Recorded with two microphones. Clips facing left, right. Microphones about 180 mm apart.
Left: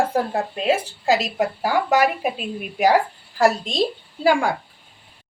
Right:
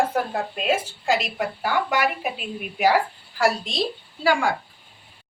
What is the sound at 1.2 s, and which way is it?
A woman's voice, 40° left (ahead or behind).